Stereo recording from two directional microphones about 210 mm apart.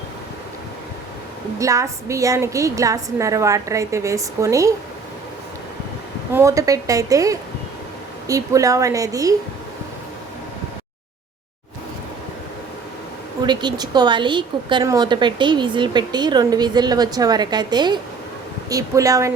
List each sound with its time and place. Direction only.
1.5 s a woman's voice: 15° right (ahead or behind)
6.3 s a woman's voice: 15° right (ahead or behind)
13.4 s a woman's voice: 20° right (ahead or behind)